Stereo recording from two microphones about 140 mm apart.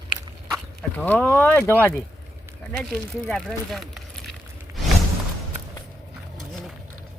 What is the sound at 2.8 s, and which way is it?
Speech, 5° left (ahead or behind).